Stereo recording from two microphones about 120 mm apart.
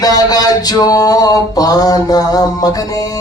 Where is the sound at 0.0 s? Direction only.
30° left (ahead or behind).